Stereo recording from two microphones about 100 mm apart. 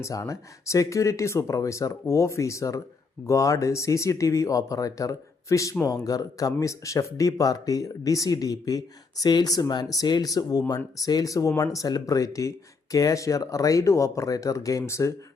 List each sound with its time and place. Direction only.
0.0 s speech: 30° left (ahead or behind)